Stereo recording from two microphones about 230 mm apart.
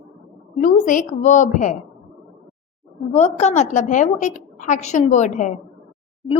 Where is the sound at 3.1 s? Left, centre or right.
Left.